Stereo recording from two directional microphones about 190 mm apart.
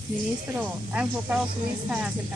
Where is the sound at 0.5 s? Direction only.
5° right (ahead or behind).